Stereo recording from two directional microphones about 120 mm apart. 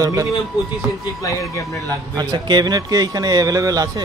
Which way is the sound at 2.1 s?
40° right (ahead or behind).